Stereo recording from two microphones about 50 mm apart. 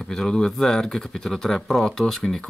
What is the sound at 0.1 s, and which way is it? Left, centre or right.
Speech, centre.